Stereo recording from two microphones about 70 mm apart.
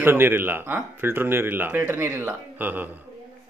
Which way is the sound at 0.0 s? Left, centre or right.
Right.